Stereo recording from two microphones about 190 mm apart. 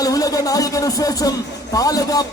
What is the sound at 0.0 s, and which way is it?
A man's voice, 20° left (ahead or behind).